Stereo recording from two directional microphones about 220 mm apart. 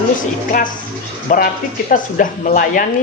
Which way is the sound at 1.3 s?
35° left (ahead or behind).